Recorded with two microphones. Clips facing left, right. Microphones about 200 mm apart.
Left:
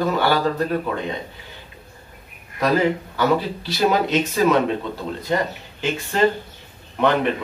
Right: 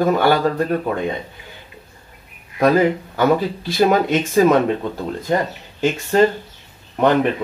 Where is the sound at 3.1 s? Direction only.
50° right (ahead or behind).